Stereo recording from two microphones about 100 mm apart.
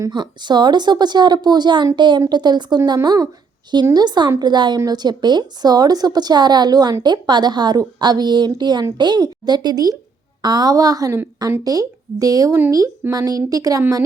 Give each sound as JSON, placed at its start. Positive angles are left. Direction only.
{"t": 0.1, "sound": "a woman's voice", "side_deg": -50}